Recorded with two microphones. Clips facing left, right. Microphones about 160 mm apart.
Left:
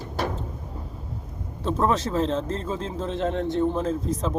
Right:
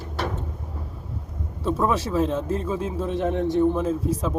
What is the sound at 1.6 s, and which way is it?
Speech, 10° right (ahead or behind).